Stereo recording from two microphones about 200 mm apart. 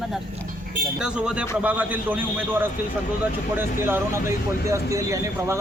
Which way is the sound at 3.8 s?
10° right (ahead or behind).